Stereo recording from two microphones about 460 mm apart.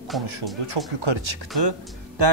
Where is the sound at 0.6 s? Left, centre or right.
Right.